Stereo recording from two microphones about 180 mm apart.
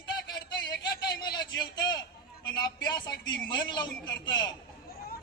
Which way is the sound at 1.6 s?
25° left (ahead or behind).